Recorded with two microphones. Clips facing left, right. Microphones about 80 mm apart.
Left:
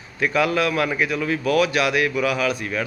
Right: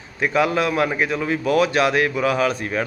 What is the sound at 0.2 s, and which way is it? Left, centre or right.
A man's voice, right.